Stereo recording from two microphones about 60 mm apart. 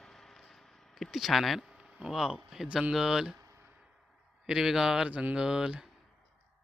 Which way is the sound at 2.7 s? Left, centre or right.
Centre.